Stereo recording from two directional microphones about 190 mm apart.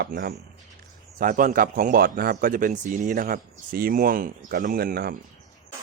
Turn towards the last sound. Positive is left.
turn(degrees=-50)  # may be behind; listen again after turning